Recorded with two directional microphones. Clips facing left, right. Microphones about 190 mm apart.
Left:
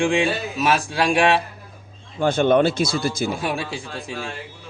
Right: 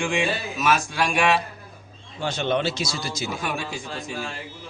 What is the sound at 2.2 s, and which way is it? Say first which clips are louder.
Speech: left 8 dB; 50° left (ahead or behind).